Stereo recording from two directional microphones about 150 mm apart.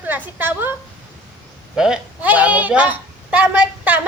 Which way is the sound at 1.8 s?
10° right (ahead or behind).